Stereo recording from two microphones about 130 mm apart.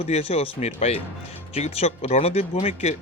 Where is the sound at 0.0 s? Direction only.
50° left (ahead or behind).